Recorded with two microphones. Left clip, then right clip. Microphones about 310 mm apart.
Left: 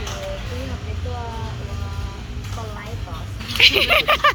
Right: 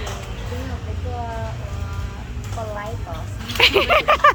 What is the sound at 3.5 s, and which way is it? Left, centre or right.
Speech, centre.